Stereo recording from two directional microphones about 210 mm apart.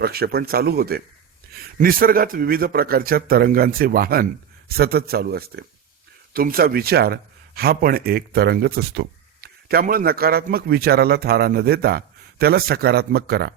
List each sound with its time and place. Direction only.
0.0 s speech: 45° right (ahead or behind)